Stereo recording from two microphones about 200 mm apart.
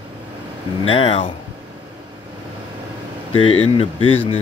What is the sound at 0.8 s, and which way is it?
Speech, 30° left (ahead or behind).